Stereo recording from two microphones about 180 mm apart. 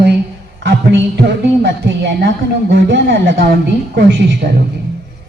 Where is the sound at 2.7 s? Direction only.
80° right; by 4.0 s 65° right (ahead or behind).